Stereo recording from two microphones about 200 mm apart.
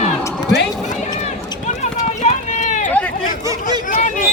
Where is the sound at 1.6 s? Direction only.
35° left (ahead or behind).